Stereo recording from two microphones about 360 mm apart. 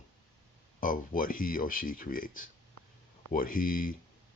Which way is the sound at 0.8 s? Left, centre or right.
Left.